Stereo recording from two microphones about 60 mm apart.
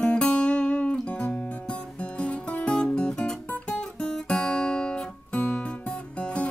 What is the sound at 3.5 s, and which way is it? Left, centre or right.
Guitar, centre.